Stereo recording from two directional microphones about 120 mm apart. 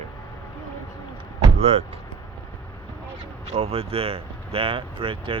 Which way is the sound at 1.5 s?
60° right (ahead or behind).